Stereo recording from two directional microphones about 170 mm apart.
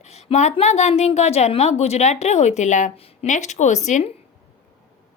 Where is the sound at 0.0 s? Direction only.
40° left (ahead or behind).